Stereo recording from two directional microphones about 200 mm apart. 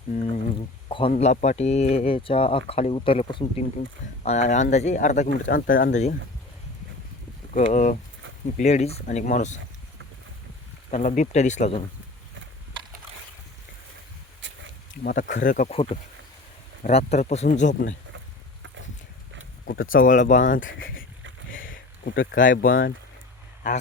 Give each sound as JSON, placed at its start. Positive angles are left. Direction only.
{"t": 0.1, "sound": "speech", "side_deg": 35}
{"t": 7.5, "sound": "speech", "side_deg": 35}
{"t": 10.9, "sound": "speech", "side_deg": 40}
{"t": 15.0, "sound": "speech", "side_deg": 45}
{"t": 19.6, "sound": "speech", "side_deg": 45}
{"t": 21.5, "sound": "a sound", "side_deg": 75}
{"t": 22.2, "sound": "speech", "side_deg": 45}